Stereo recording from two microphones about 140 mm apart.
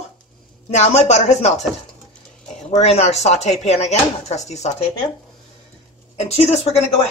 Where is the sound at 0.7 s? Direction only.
55° left (ahead or behind).